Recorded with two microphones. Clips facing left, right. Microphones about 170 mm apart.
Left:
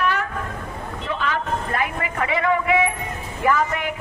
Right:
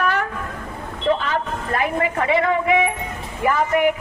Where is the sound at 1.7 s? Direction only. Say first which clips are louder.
Right 4 dB; 30° right (ahead or behind).